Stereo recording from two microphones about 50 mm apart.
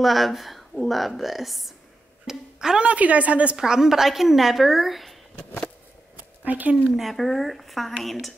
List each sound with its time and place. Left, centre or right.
0.0 s a woman's voice: centre
2.2 s speech: centre
2.9 s a woman's voice: right
3.5 s a woman's voice: centre
6.1 s a sound: right
7.0 s a woman's voice: centre